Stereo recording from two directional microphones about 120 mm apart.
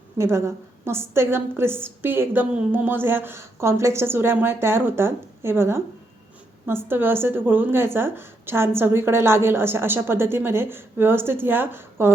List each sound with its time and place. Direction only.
0.2 s a woman's voice: 20° right (ahead or behind)